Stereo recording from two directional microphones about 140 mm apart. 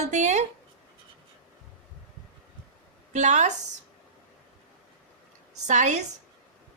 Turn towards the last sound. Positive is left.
turn(degrees=-60)  # may be behind; listen again after turning